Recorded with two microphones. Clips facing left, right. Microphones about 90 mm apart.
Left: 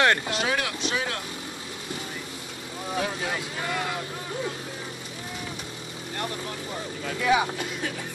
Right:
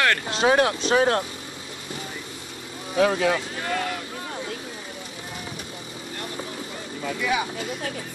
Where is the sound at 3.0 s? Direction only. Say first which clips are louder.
Right 10 dB; 90° right.